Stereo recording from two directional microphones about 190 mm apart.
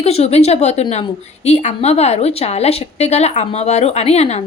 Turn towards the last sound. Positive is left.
turn(degrees=35)  # may be behind; listen again after turning